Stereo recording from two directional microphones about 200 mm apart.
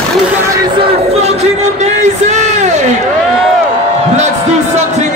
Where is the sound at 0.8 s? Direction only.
35° right (ahead or behind).